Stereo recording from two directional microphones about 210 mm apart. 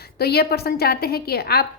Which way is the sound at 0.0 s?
50° left (ahead or behind).